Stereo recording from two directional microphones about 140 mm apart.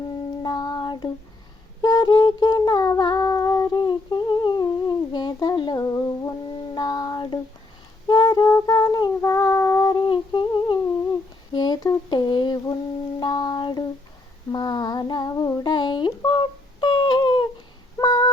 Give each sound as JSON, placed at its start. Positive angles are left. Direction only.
{"t": 0.4, "sound": "child singing", "side_deg": 30}
{"t": 1.8, "sound": "humming", "side_deg": 30}
{"t": 6.7, "sound": "child singing", "side_deg": 30}
{"t": 11.5, "sound": "a sound", "side_deg": 30}
{"t": 18.0, "sound": "female singing", "side_deg": 30}